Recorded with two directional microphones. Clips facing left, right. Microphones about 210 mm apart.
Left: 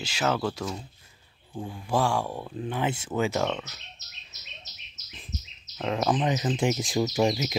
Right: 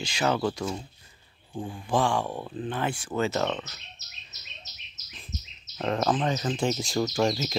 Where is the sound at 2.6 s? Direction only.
10° left (ahead or behind).